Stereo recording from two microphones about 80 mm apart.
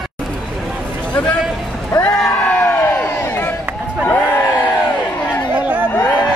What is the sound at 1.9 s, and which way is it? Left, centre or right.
Music, left.